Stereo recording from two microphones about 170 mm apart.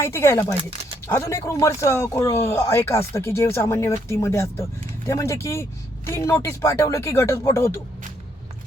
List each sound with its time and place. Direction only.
0.0 s speech: 15° left (ahead or behind)